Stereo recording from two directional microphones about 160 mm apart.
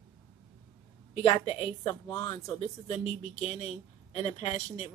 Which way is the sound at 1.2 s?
40° left (ahead or behind).